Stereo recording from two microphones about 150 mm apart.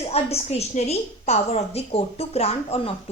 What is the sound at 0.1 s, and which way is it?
A woman's voice, 45° left (ahead or behind).